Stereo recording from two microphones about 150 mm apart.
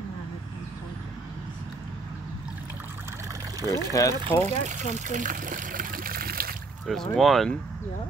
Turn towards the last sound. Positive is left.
turn(degrees=0)  # may be behind; listen again after turning